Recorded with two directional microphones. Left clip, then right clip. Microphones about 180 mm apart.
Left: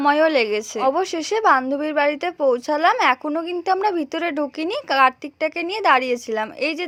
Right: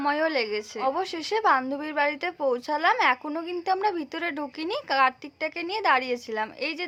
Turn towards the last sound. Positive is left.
turn(degrees=35)  # may be behind; listen again after turning